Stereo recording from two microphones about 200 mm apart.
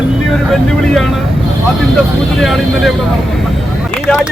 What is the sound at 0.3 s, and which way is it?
Speech, centre (ahead or behind).